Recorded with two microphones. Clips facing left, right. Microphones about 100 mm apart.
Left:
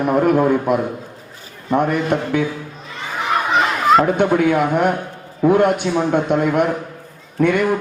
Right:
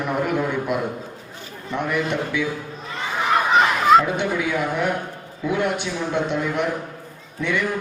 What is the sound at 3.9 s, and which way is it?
A man's voice, 50° left (ahead or behind).